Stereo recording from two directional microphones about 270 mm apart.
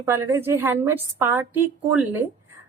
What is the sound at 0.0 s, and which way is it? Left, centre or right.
Speech, centre.